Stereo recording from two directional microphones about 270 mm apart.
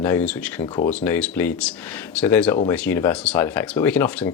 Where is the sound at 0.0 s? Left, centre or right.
Centre.